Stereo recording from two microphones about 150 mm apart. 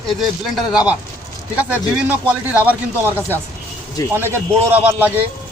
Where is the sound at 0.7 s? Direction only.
5° right (ahead or behind).